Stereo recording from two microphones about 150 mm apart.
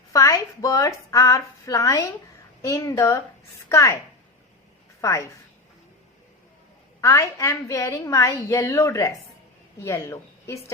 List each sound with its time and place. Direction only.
0.1 s a woman's voice: 20° left (ahead or behind)
4.9 s a woman's voice: 20° left (ahead or behind)
7.0 s a woman's voice: 20° left (ahead or behind)